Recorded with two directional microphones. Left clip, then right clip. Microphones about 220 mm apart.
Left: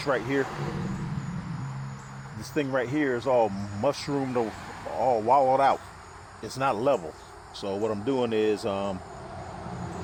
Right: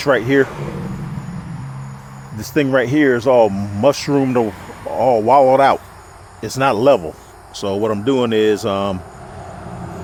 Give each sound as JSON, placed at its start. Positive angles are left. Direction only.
{"t": 0.0, "sound": "speech", "side_deg": -40}
{"t": 2.4, "sound": "speech", "side_deg": -45}